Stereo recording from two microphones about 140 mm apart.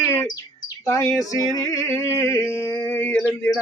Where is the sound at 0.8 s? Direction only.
20° left (ahead or behind).